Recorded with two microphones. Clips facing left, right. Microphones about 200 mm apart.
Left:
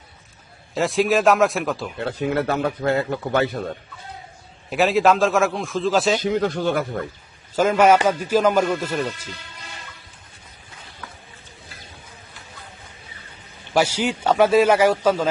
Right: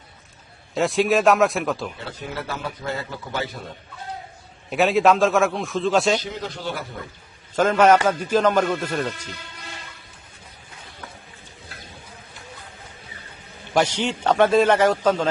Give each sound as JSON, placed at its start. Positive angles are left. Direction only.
{"t": 0.7, "sound": "a man's voice", "side_deg": 0}
{"t": 2.0, "sound": "a man's voice", "side_deg": 60}
{"t": 4.7, "sound": "a man's voice", "side_deg": 0}
{"t": 6.2, "sound": "speech", "side_deg": 55}
{"t": 7.5, "sound": "a man's voice", "side_deg": 10}
{"t": 11.7, "sound": "insect", "side_deg": -60}
{"t": 13.7, "sound": "a man's voice", "side_deg": 10}